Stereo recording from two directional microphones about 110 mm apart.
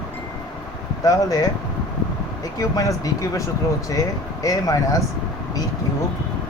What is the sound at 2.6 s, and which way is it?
Speech, 30° left (ahead or behind).